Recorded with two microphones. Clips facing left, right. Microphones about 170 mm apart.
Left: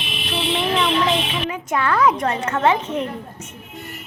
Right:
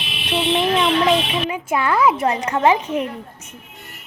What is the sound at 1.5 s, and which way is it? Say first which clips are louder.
A woman's voice: right 1 dB; 10° right (ahead or behind).